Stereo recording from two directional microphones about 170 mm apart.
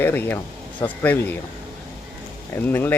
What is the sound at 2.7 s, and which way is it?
Speech, 10° left (ahead or behind).